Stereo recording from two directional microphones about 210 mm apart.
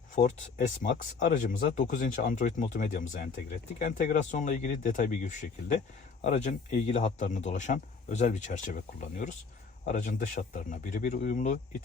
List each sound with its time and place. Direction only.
0.2 s speech: 30° left (ahead or behind)